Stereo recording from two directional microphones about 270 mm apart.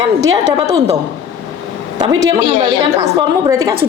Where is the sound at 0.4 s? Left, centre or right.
Right.